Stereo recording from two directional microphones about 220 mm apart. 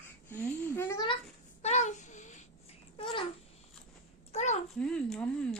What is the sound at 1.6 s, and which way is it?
Babbling, 30° left (ahead or behind).